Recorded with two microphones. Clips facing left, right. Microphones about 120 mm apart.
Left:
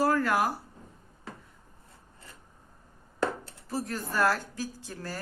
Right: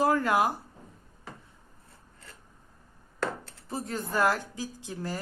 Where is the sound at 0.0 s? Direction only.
20° right (ahead or behind).